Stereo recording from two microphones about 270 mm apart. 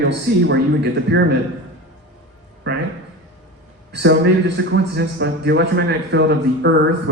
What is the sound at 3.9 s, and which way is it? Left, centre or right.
A man's voice, right.